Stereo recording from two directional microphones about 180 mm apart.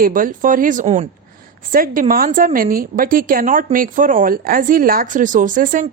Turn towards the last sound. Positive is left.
turn(degrees=-45)  # may be behind; listen again after turning